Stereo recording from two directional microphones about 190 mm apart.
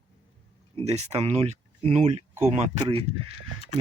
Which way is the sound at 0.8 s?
35° right (ahead or behind).